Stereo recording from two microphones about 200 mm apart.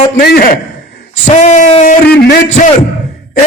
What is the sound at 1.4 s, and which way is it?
Speech, 35° left (ahead or behind).